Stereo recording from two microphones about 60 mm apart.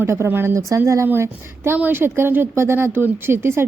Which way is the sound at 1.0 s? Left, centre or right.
Right.